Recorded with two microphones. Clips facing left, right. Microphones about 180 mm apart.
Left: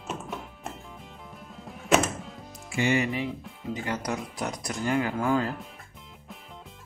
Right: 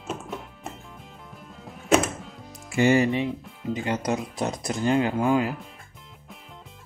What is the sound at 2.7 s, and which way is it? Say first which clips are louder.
Speech: right 6 dB; 40° right (ahead or behind).